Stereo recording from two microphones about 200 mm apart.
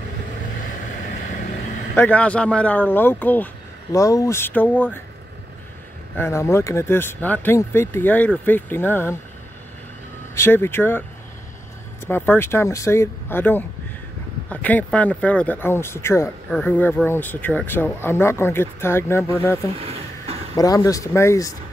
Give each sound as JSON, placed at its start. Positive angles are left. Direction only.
{"t": 2.0, "sound": "speech", "side_deg": 5}
{"t": 6.1, "sound": "speech", "side_deg": 15}
{"t": 10.3, "sound": "speech", "side_deg": 10}
{"t": 12.1, "sound": "speech", "side_deg": 10}
{"t": 19.7, "sound": "a sound", "side_deg": -30}
{"t": 20.5, "sound": "speech", "side_deg": 15}